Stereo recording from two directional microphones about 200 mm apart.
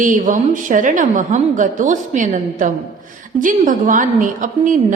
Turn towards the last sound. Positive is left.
turn(degrees=-40)  # may be behind; listen again after turning